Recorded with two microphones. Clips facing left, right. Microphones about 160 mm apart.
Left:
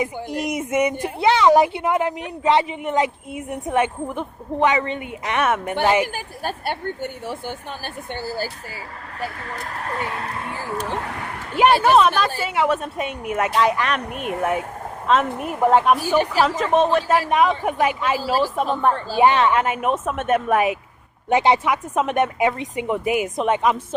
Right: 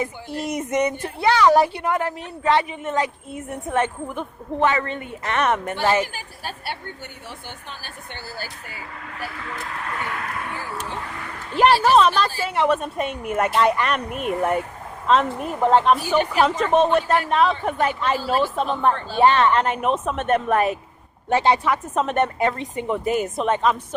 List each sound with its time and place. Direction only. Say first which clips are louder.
0.0 s a woman's voice: left 3 dB; 15° left (ahead or behind)
6.4 s speech: left 7 dB; 50° left (ahead or behind)
9.4 s speech: left 1 dB; 40° left (ahead or behind)
10.8 s a sound: left 4 dB; 70° left (ahead or behind)
11.5 s a woman's voice: left 1 dB; 10° left (ahead or behind)